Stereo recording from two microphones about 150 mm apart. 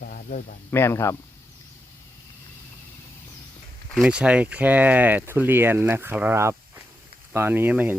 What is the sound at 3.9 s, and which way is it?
Speech, 5° right (ahead or behind).